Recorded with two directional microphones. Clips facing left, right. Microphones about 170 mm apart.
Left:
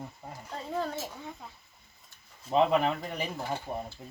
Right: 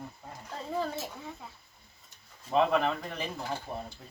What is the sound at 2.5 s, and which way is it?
Speech, 15° left (ahead or behind).